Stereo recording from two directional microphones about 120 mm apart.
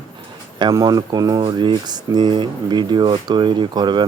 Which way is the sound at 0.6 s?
30° right (ahead or behind).